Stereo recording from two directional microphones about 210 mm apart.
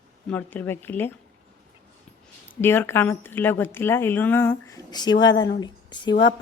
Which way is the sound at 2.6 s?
10° left (ahead or behind).